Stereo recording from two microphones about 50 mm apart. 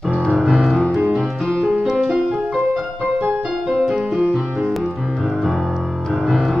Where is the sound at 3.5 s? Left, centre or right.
Centre.